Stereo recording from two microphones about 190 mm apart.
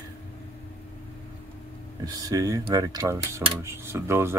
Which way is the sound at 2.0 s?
20° right (ahead or behind).